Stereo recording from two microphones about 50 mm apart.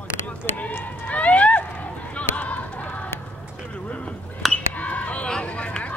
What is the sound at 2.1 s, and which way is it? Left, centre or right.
Run, left.